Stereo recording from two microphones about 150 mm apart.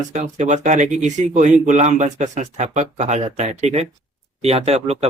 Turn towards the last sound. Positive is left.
turn(degrees=-45)  # may be behind; listen again after turning